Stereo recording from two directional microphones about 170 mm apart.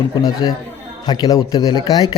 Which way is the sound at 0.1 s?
20° left (ahead or behind).